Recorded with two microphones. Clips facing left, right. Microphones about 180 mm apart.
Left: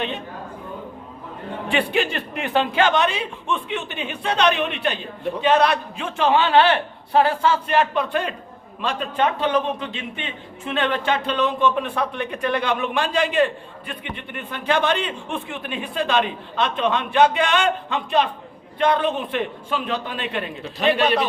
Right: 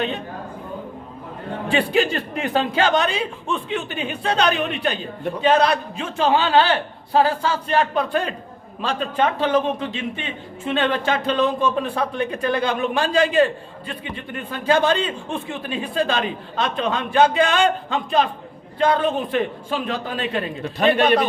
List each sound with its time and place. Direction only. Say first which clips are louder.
1.6 s speech: right 2 dB; 35° right (ahead or behind)
10.7 s speech: right 1 dB; 35° right (ahead or behind)
20.7 s a man's voice: right 2 dB; 50° right (ahead or behind)